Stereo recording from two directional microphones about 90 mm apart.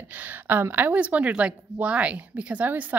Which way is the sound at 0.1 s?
20° right (ahead or behind).